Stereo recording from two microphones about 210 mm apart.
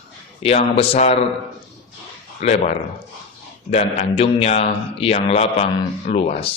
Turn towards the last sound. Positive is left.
turn(degrees=35)  # may be behind; listen again after turning